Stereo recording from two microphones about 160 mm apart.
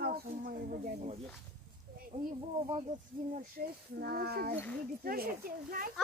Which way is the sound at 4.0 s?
80° right.